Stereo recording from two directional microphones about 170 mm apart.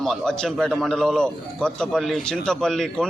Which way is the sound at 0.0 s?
5° left (ahead or behind).